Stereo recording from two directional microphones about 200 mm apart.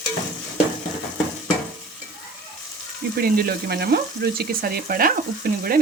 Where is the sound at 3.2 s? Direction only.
50° right (ahead or behind).